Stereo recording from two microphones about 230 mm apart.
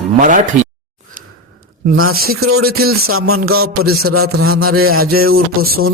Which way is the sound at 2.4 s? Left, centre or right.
Right.